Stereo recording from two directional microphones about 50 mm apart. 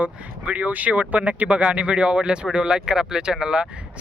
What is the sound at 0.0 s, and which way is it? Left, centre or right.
Speech, right.